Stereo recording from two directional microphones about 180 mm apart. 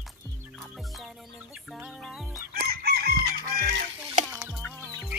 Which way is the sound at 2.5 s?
60° right (ahead or behind).